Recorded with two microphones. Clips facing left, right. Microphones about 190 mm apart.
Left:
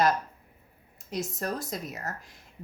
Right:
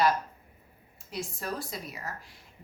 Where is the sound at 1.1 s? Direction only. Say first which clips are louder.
Left 3 dB; 40° left (ahead or behind).